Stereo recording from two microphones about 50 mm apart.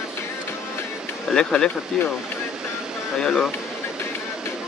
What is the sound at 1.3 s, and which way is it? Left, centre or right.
Speech, centre.